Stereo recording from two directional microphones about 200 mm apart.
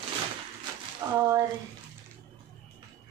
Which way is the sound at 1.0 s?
15° right (ahead or behind).